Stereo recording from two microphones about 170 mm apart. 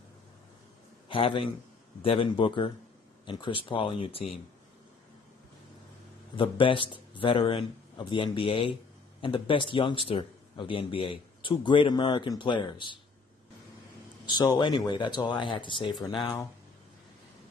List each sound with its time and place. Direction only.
1.0 s a man's voice: 30° left (ahead or behind)
6.3 s a man's voice: 30° left (ahead or behind)
14.2 s a man's voice: 25° left (ahead or behind)